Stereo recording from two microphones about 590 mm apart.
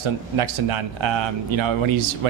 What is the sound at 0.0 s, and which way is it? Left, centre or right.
Speech, right.